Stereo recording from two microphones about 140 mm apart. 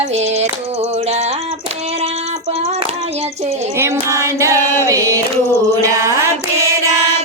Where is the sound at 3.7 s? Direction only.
20° right (ahead or behind).